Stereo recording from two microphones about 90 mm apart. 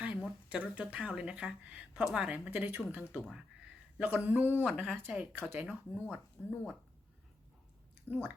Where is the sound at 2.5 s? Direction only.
20° right (ahead or behind).